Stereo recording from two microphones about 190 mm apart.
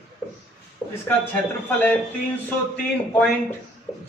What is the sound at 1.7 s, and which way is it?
Speech, 10° left (ahead or behind).